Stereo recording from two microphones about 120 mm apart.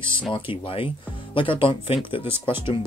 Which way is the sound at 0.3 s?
45° left (ahead or behind).